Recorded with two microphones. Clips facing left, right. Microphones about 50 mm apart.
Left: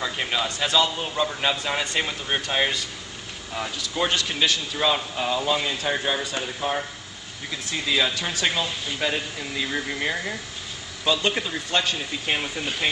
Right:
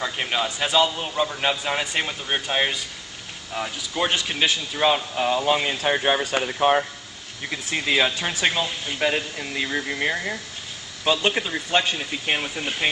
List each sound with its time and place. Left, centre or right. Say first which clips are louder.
0.0 s a man's voice: right 1 dB; centre
5.3 s a man's voice: right 2 dB; right